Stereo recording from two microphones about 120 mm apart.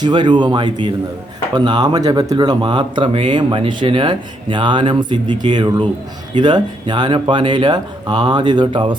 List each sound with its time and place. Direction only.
0.0 s speech: 40° right (ahead or behind)